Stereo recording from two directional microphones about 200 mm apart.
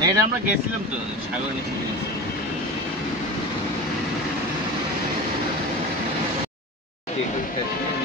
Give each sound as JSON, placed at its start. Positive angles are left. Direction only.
{"t": 0.0, "sound": "speech", "side_deg": -15}